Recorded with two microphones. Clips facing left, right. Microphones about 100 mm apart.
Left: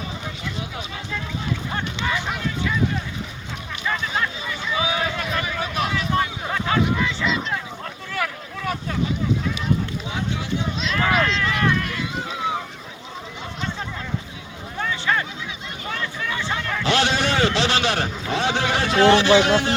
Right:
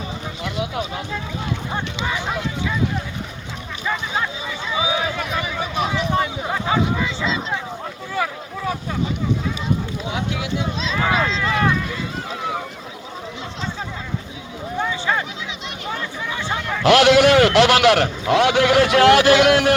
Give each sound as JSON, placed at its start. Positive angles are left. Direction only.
{"t": 3.8, "sound": "a sound", "side_deg": -15}
{"t": 8.1, "sound": "boat", "side_deg": -20}
{"t": 10.2, "sound": "speech", "side_deg": -90}
{"t": 11.4, "sound": "speech", "side_deg": -25}
{"t": 14.8, "sound": "a sound", "side_deg": -15}
{"t": 16.8, "sound": "a man's voice", "side_deg": -85}